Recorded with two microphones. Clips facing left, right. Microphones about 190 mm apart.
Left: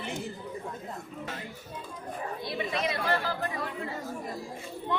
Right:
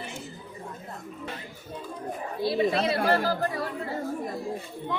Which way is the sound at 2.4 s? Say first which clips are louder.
Right 9 dB; 30° right (ahead or behind).